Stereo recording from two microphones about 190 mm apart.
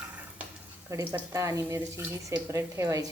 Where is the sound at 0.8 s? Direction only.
15° right (ahead or behind).